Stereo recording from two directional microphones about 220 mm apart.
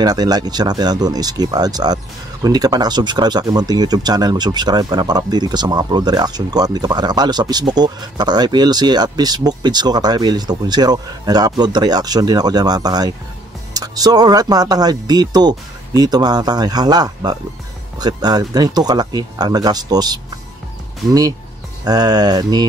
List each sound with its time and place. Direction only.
0.0 s speech: 15° right (ahead or behind)